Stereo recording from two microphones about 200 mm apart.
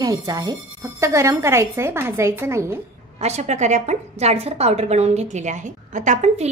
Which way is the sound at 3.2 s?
35° right (ahead or behind).